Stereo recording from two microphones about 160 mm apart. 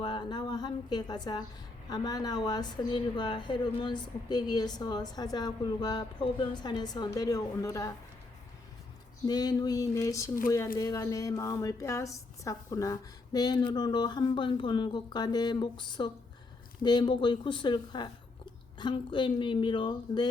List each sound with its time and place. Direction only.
0.0 s speech: 30° left (ahead or behind)
9.2 s speech: 25° left (ahead or behind)